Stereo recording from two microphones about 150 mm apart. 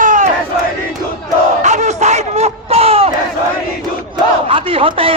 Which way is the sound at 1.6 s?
50° right (ahead or behind).